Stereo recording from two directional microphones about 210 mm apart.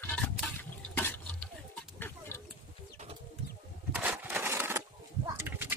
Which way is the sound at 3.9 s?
10° right (ahead or behind).